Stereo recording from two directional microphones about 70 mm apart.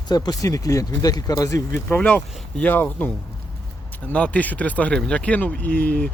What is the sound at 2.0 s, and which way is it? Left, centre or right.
Speech, centre.